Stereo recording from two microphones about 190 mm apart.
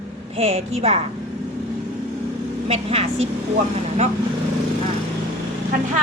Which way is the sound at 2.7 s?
30° right (ahead or behind).